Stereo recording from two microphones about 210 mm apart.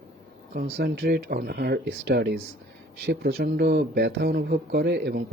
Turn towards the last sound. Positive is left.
turn(degrees=-55)  # may be behind; listen again after turning